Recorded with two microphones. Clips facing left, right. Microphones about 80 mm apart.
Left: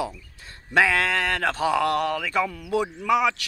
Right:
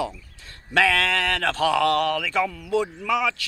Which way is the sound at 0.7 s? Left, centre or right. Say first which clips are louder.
Even; left.